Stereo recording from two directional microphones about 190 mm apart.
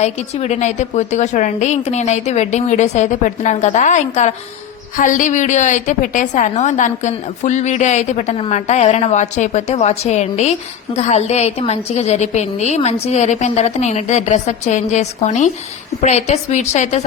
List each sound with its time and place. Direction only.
0.0 s a woman's voice: 35° left (ahead or behind)